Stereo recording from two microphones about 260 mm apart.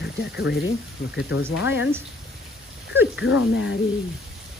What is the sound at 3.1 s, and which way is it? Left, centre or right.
Speech, left.